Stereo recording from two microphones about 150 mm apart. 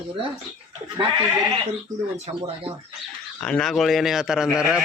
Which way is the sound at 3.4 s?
5° left (ahead or behind).